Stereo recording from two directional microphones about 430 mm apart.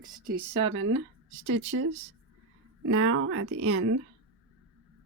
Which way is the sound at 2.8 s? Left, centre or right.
Right.